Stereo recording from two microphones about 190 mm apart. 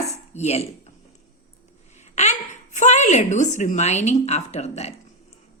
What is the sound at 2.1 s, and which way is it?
A woman's voice, 35° left (ahead or behind).